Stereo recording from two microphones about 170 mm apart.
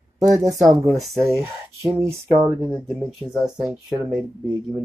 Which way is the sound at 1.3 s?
15° right (ahead or behind).